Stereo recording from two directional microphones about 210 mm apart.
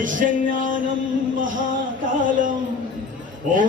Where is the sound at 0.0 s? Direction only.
40° right (ahead or behind).